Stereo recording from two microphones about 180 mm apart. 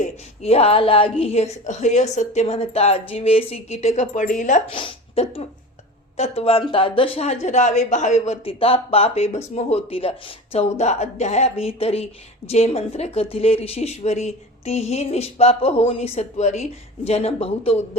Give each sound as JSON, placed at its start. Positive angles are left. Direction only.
{"t": 0.0, "sound": "a woman's voice", "side_deg": 35}
{"t": 4.7, "sound": "a woman's voice", "side_deg": 30}